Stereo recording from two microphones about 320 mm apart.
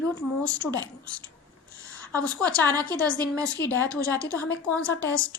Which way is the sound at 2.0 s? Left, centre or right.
Centre.